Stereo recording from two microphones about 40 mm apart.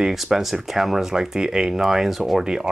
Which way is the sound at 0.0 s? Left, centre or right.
Centre.